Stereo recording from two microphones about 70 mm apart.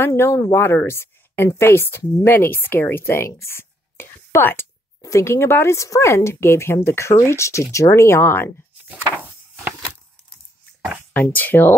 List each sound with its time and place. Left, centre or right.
0.1 s a woman's voice: left
3.3 s a sound: left
5.0 s a woman's voice: left
11.1 s speech: left